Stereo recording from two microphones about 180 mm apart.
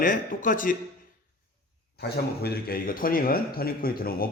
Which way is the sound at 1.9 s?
60° left (ahead or behind).